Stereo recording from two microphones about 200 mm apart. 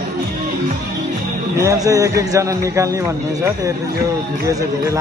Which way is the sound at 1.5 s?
15° right (ahead or behind).